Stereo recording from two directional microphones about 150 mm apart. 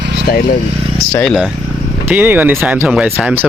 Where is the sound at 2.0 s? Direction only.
15° right (ahead or behind).